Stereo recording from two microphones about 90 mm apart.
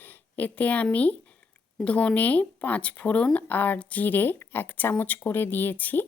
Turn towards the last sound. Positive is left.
turn(degrees=20)  # may be behind; listen again after turning